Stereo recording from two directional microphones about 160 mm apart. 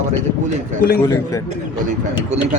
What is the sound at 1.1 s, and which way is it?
Speech, 20° left (ahead or behind).